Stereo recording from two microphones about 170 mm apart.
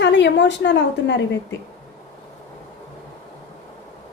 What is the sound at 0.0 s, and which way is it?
A woman's voice, 90° left.